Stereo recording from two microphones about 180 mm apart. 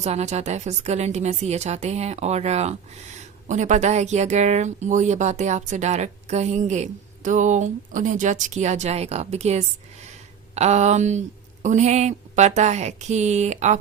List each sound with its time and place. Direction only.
0.0 s speech: 40° right (ahead or behind)